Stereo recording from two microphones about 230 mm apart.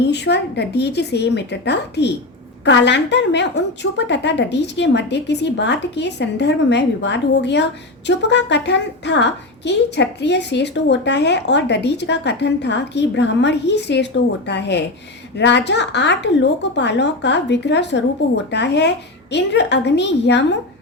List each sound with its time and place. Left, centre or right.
0.0 s a woman's voice: left